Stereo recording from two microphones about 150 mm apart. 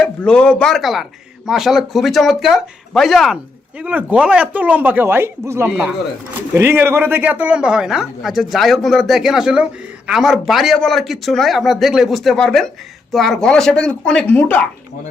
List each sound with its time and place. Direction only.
0.0 s speech: 5° left (ahead or behind)